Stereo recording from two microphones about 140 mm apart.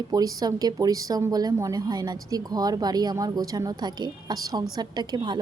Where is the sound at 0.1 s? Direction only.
25° right (ahead or behind).